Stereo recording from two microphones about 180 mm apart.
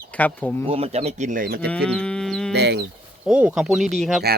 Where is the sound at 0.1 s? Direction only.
10° left (ahead or behind).